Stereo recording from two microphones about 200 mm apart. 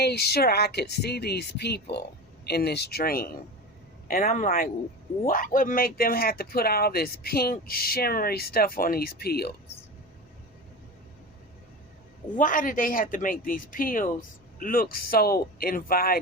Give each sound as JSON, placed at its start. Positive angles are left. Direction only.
{"t": 0.0, "sound": "speech", "side_deg": 55}
{"t": 12.4, "sound": "speech", "side_deg": 40}